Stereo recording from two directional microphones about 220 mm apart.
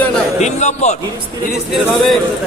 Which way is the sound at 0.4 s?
30° left (ahead or behind).